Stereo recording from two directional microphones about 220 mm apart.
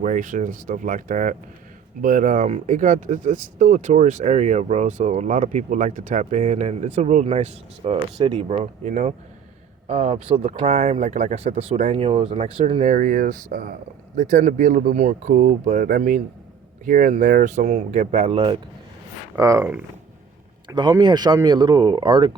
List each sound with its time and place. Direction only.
0.0 s speech: 35° right (ahead or behind)